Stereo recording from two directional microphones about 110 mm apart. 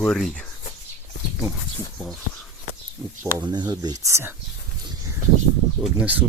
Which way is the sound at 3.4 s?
40° right (ahead or behind).